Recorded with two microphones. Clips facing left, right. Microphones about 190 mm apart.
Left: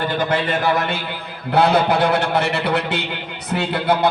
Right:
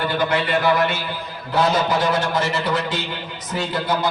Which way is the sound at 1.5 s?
60° left (ahead or behind).